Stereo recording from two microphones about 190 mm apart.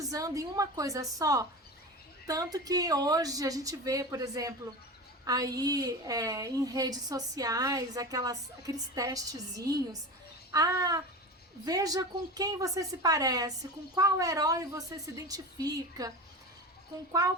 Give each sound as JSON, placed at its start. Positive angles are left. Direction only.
{"t": 0.0, "sound": "a woman's voice", "side_deg": -20}